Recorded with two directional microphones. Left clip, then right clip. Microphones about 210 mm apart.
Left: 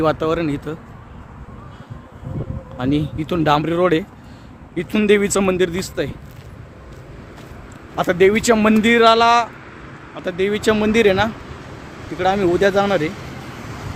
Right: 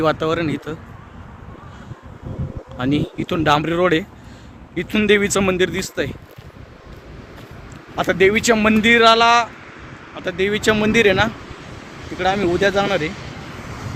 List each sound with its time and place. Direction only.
0.0 s speech: 5° left (ahead or behind)
2.7 s speech: centre (ahead or behind)
7.9 s speech: 10° left (ahead or behind)
11.6 s vehicle: 50° left (ahead or behind)
12.1 s speech: 15° left (ahead or behind)
13.0 s speech: 55° left (ahead or behind)